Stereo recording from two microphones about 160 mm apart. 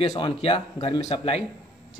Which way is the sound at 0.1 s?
35° left (ahead or behind).